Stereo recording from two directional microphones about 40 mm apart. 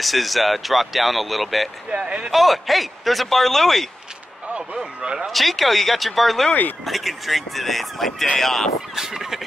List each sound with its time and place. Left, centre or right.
0.0 s speech: centre
2.0 s speech: right
2.3 s speech: centre
4.6 s speech: centre
5.3 s speech: centre
8.9 s speech: centre